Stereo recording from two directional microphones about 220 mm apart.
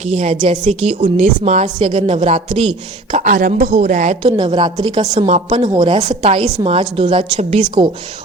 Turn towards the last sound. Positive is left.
turn(degrees=-30)  # may be behind; listen again after turning